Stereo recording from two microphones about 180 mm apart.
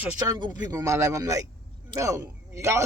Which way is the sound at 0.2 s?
25° right (ahead or behind).